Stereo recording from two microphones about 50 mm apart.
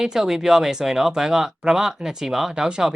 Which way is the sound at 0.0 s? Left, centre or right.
Centre.